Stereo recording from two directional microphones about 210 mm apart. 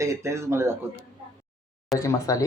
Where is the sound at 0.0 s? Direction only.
15° right (ahead or behind).